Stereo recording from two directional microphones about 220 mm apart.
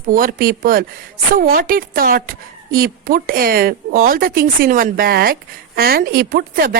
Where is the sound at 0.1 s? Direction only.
40° right (ahead or behind).